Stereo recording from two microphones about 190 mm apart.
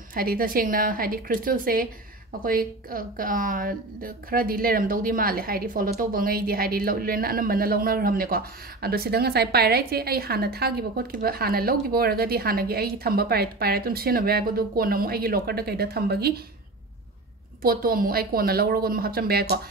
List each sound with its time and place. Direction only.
0.1 s a woman's voice: 50° right (ahead or behind)
17.6 s a woman's voice: 50° right (ahead or behind)